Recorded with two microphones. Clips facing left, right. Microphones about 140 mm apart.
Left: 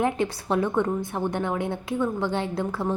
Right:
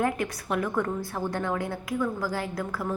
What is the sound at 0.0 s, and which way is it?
A woman's voice, 30° left (ahead or behind).